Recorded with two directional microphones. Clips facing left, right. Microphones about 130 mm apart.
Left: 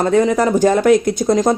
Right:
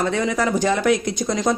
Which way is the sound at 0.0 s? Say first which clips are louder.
Left 7 dB; 40° left (ahead or behind).